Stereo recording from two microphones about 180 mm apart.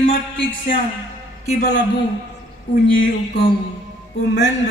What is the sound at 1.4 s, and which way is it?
Speech, 45° left (ahead or behind).